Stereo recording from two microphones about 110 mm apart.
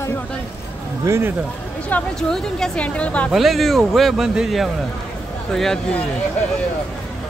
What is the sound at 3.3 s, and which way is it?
Speech, centre (ahead or behind).